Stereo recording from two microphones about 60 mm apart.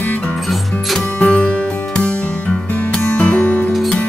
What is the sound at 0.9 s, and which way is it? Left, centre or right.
Music, centre.